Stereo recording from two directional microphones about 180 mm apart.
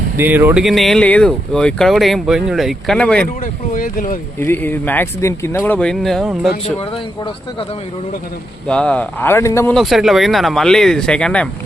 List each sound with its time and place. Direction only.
0.2 s speech: 10° right (ahead or behind); by 3.2 s 5° left (ahead or behind)
3.4 s speech: 50° left (ahead or behind)
4.4 s speech: 10° left (ahead or behind)
8.6 s speech: 5° left (ahead or behind)
9.7 s speech: centre (ahead or behind)